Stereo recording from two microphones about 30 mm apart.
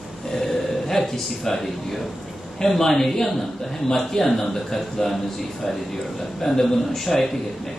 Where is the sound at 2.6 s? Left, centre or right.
Centre.